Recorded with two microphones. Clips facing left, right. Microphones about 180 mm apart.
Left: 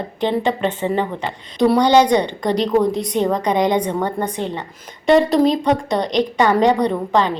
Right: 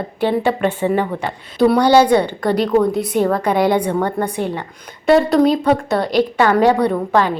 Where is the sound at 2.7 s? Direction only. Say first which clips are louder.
Right 1 dB; 20° left (ahead or behind).